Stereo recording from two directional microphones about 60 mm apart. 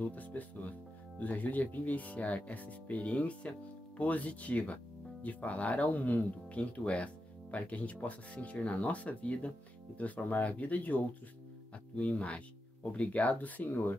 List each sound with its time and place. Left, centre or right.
0.0 s speech: left
12.0 s speech: left